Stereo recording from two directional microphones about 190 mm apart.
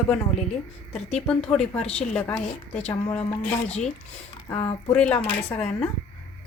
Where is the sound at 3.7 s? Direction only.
35° left (ahead or behind).